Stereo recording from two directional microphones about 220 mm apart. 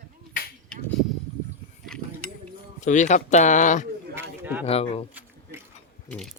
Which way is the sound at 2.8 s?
35° left (ahead or behind).